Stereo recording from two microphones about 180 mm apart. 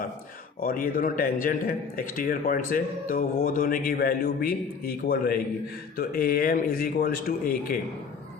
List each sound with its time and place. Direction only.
0.6 s a man's voice: 50° left (ahead or behind)